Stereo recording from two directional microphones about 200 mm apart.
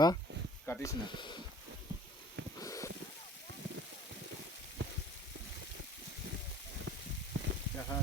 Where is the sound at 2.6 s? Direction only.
15° left (ahead or behind).